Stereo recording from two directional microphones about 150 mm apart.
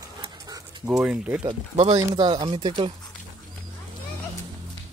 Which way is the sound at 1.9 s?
30° right (ahead or behind).